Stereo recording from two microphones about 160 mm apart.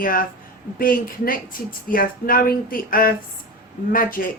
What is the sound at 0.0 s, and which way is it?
A woman's voice, 60° left (ahead or behind).